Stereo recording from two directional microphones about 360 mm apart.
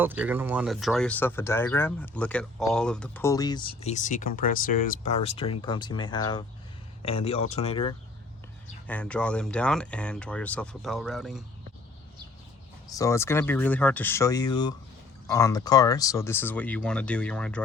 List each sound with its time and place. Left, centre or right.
0.0 s speech: centre
8.9 s speech: centre
12.9 s speech: centre